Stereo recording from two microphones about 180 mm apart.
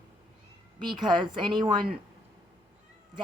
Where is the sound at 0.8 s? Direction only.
25° right (ahead or behind).